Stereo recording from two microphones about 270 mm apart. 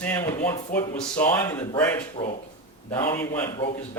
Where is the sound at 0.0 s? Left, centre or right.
Centre.